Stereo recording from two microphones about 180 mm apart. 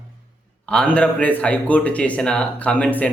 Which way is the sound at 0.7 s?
5° left (ahead or behind).